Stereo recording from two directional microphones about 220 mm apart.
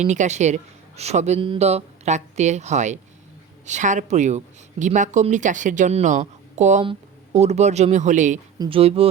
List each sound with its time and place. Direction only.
0.1 s speech: 30° right (ahead or behind)
8.5 s speech: 20° right (ahead or behind)